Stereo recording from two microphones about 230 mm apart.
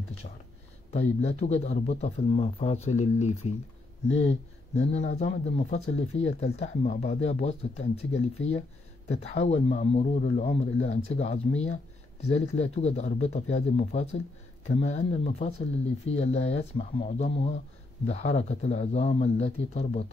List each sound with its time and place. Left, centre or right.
0.9 s speech: left